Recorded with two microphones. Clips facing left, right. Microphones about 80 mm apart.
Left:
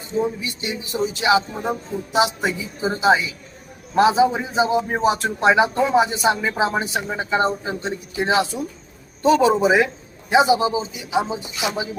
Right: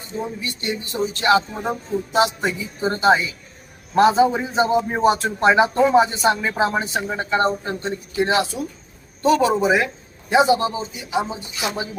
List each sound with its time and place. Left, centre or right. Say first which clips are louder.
0.2 s a man's voice: left 5 dB; centre
7.8 s a man's voice: right 2 dB; centre